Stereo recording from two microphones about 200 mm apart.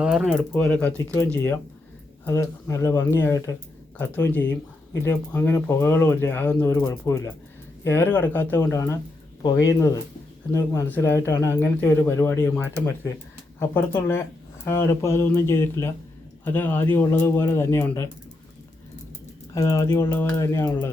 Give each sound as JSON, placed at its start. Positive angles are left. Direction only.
{"t": 0.0, "sound": "speech", "side_deg": -5}
{"t": 19.5, "sound": "speech", "side_deg": 15}